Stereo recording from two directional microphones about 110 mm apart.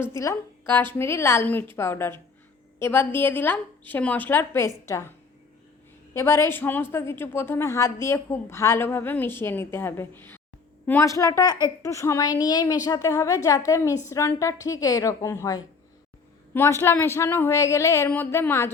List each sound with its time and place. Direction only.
0.0 s a woman's voice: 25° left (ahead or behind)
6.1 s a woman's voice: 25° left (ahead or behind)
11.0 s a woman's voice: 30° left (ahead or behind)
16.8 s a woman's voice: 20° left (ahead or behind)